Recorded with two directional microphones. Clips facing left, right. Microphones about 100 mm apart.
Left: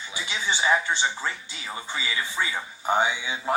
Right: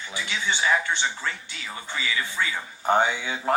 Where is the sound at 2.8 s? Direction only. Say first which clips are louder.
Right 2 dB; 50° right (ahead or behind).